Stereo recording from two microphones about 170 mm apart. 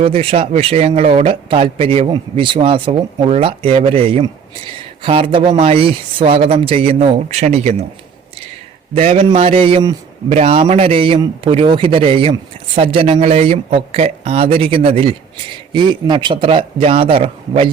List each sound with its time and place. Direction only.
0.0 s speech: 35° right (ahead or behind)
9.0 s speech: 35° right (ahead or behind)